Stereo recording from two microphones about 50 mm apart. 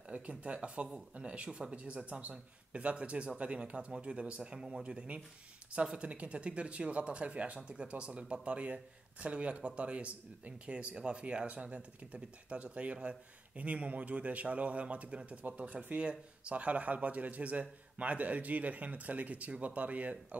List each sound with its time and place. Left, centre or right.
0.1 s speech: right